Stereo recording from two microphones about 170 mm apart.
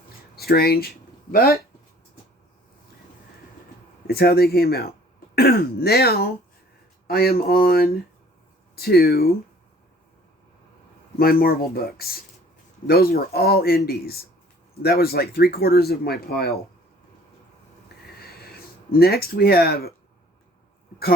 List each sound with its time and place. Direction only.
0.3 s speech: 65° left (ahead or behind)
4.0 s speech: 65° left (ahead or behind)
11.2 s speech: 60° left (ahead or behind)
18.2 s a sound: 65° left (ahead or behind)